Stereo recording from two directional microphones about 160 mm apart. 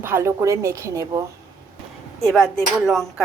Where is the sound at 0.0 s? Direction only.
15° right (ahead or behind).